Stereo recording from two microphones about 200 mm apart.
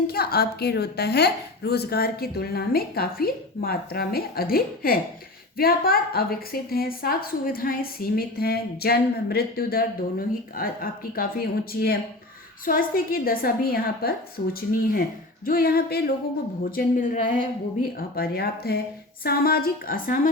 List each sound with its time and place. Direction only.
0.1 s a woman's voice: 50° left (ahead or behind)
15.4 s a woman's voice: 50° left (ahead or behind)